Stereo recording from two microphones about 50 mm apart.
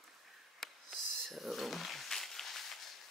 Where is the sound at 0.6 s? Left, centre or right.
Centre.